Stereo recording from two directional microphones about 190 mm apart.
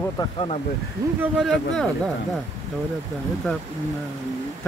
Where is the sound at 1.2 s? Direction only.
Centre (ahead or behind).